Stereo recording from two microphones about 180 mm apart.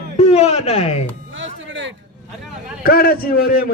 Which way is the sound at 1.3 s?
90° right.